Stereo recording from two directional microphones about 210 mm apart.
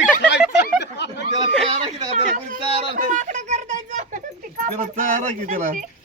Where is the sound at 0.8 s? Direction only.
55° left (ahead or behind).